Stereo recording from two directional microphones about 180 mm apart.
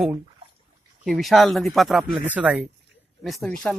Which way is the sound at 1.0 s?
Centre (ahead or behind).